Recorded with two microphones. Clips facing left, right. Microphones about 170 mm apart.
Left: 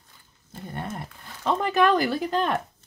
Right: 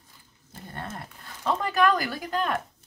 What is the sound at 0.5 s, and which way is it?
Speech, 15° left (ahead or behind).